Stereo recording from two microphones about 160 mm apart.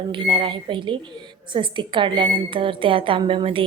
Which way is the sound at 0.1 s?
30° right (ahead or behind).